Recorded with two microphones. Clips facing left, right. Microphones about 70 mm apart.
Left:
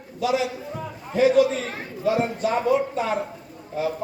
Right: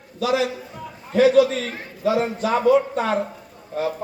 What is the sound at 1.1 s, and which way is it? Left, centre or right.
A man's voice, right.